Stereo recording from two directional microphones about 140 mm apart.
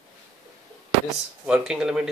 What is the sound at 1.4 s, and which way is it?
Speech, 5° right (ahead or behind).